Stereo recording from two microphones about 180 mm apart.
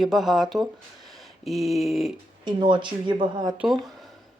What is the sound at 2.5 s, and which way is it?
Speech, 25° right (ahead or behind).